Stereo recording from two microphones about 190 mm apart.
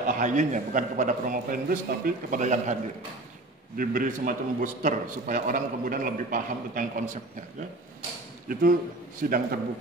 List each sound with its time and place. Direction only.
0.0 s a man's voice: 40° right (ahead or behind)
9.2 s a man's voice: 50° right (ahead or behind)